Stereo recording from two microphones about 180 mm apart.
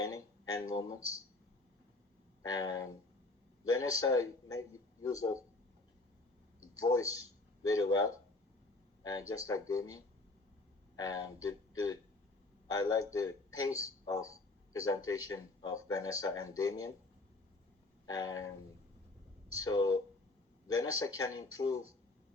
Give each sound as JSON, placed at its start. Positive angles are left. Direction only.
{"t": 0.0, "sound": "a sound", "side_deg": 20}
{"t": 2.4, "sound": "speech", "side_deg": 20}
{"t": 6.7, "sound": "speech", "side_deg": 20}
{"t": 9.5, "sound": "a man's voice", "side_deg": 20}
{"t": 18.0, "sound": "train", "side_deg": 20}
{"t": 19.6, "sound": "speech", "side_deg": 20}